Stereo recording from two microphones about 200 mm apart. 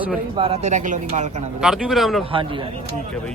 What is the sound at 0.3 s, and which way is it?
Speech, 30° right (ahead or behind).